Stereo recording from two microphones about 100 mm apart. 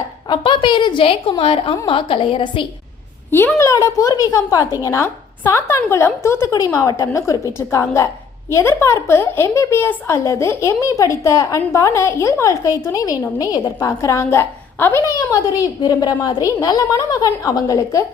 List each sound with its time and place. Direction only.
0.3 s a woman's voice: 55° left (ahead or behind)
1.4 s a woman's voice: 70° left (ahead or behind)
3.3 s speech: 20° left (ahead or behind)
3.7 s a woman's voice: 30° left (ahead or behind)
15.0 s a woman's voice: 35° left (ahead or behind)